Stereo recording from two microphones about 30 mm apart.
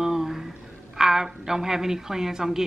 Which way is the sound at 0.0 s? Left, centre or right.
Centre.